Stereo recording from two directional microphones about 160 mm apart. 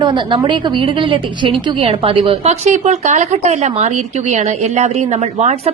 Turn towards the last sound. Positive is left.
turn(degrees=-45)  # may be behind; listen again after turning